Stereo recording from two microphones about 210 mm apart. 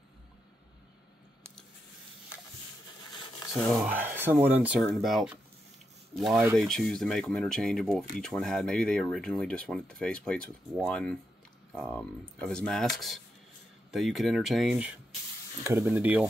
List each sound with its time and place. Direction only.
3.7 s speech: 10° right (ahead or behind)